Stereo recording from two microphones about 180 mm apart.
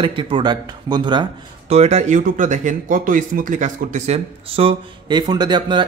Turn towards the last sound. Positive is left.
turn(degrees=-25)  # may be behind; listen again after turning